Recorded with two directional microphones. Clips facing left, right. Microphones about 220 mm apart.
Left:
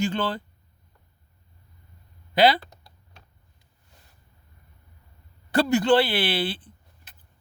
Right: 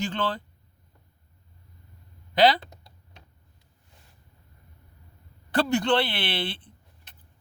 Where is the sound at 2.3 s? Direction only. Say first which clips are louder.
Left 1 dB; 10° left (ahead or behind).